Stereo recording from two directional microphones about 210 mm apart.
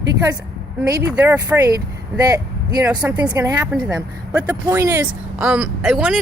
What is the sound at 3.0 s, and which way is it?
Speech, 5° right (ahead or behind).